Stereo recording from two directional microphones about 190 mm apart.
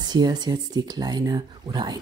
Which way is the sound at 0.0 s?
20° right (ahead or behind).